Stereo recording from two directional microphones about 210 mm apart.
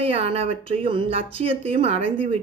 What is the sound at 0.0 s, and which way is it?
Speech, 30° right (ahead or behind).